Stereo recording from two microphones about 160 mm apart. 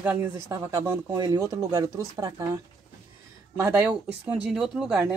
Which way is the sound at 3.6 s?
15° right (ahead or behind).